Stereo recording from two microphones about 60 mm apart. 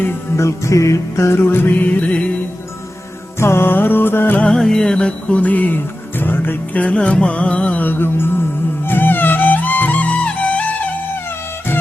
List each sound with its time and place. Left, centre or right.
0.3 s music: left
1.4 s music: left
3.3 s music: left
4.5 s music: centre; by 6.8 s left
6.8 s music: centre